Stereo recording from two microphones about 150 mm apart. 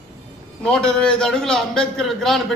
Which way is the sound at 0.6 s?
5° left (ahead or behind).